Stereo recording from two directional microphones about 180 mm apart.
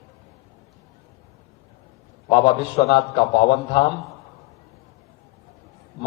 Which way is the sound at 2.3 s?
30° left (ahead or behind).